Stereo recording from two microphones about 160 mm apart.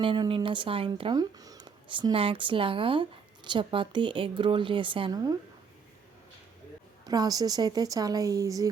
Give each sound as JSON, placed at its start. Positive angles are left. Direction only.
{"t": 0.0, "sound": "speech", "side_deg": -30}
{"t": 7.0, "sound": "speech", "side_deg": -25}